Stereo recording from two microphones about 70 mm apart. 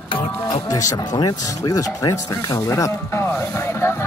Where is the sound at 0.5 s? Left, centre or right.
Left.